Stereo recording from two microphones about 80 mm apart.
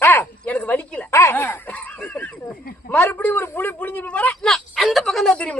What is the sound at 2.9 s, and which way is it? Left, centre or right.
Speech, left.